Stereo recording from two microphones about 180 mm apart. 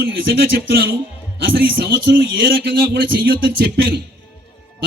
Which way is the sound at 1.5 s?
60° right (ahead or behind).